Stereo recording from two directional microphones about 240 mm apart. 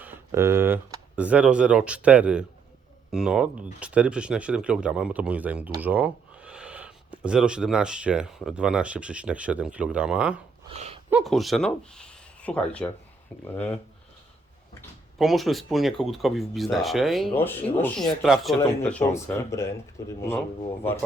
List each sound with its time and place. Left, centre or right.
0.0 s speech: centre
10.7 s speech: right
11.1 s speech: centre
14.8 s speech: centre